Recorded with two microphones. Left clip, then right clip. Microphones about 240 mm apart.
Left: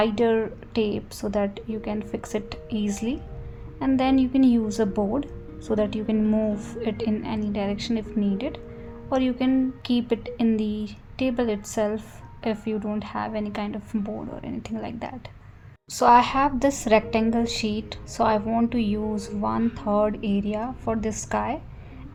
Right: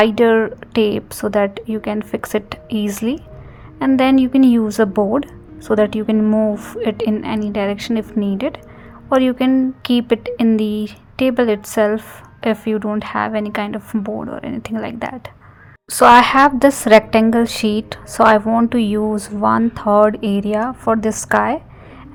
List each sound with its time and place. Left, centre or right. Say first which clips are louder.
0.0 s speech: right 9 dB; right